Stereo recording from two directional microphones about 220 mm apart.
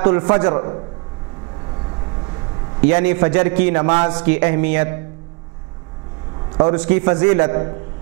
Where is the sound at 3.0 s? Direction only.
10° right (ahead or behind).